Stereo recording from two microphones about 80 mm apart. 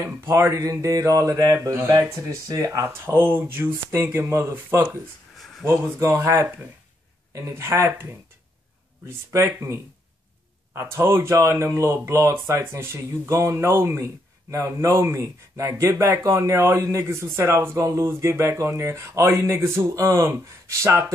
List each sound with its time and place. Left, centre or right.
0.5 s mantra: right
2.9 s speech: right
5.4 s a sound: centre
5.7 s speech: right
9.3 s speech: right